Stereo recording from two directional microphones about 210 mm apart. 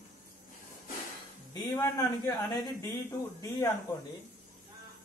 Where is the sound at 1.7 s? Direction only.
15° left (ahead or behind).